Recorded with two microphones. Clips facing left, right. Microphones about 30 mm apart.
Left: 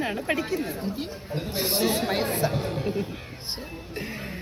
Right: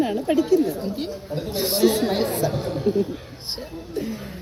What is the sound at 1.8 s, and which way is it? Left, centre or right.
Speech, centre.